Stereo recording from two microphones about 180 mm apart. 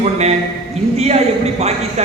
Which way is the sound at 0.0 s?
35° right (ahead or behind).